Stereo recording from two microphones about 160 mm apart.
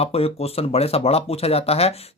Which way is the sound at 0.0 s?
40° left (ahead or behind).